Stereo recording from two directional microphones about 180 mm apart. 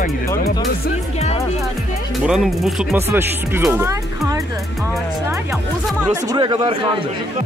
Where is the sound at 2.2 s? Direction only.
Centre (ahead or behind).